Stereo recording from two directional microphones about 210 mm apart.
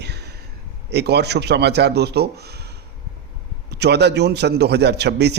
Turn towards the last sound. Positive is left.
turn(degrees=-50)  # may be behind; listen again after turning